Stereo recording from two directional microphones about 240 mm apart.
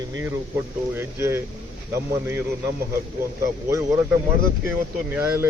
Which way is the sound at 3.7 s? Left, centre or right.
Centre.